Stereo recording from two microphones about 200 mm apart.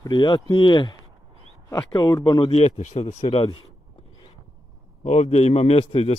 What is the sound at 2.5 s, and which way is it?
A man's voice, 35° left (ahead or behind).